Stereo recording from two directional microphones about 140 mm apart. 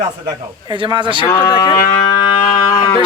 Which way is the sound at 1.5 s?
30° left (ahead or behind).